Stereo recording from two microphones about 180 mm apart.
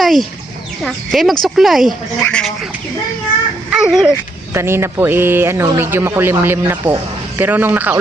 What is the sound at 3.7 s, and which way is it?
A man's voice, 5° right (ahead or behind).